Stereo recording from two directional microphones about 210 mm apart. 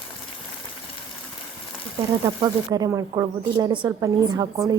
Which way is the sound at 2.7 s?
15° right (ahead or behind).